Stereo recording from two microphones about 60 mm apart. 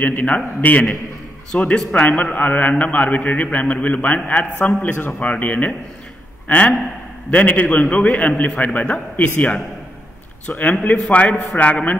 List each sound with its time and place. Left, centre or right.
0.0 s a man's voice: left
10.6 s a man's voice: left